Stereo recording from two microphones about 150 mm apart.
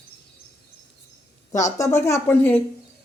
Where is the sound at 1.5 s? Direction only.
20° left (ahead or behind).